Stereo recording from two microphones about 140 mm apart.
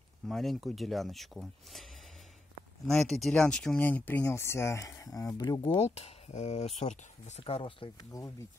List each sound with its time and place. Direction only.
0.3 s speech: centre (ahead or behind)
3.0 s speech: centre (ahead or behind); by 5.7 s 25° left (ahead or behind)
5.7 s speech: 45° left (ahead or behind)
8.1 s speech: 25° left (ahead or behind)